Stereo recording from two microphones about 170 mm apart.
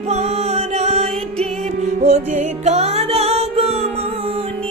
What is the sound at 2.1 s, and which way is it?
Music, 40° right (ahead or behind).